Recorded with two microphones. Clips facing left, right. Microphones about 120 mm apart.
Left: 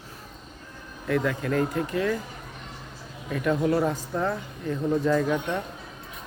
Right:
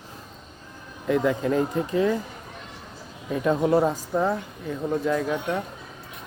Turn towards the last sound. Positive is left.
turn(degrees=0)  # may be behind; listen again after turning